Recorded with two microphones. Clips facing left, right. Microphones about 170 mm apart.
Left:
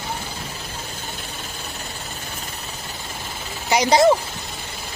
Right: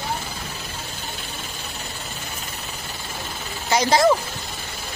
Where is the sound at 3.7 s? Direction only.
20° left (ahead or behind).